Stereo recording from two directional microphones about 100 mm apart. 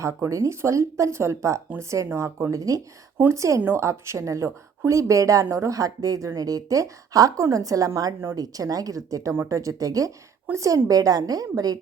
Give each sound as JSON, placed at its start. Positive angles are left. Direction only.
{"t": 0.0, "sound": "speech", "side_deg": -30}